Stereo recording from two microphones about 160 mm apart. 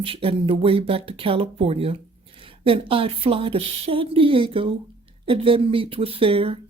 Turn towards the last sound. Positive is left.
turn(degrees=-35)  # may be behind; listen again after turning